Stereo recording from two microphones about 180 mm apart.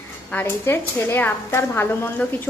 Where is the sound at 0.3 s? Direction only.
10° left (ahead or behind).